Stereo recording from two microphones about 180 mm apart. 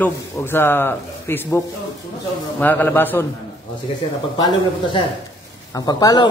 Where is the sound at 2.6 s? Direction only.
10° left (ahead or behind).